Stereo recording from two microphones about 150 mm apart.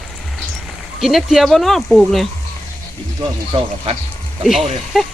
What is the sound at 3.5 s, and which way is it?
Speech, 40° right (ahead or behind).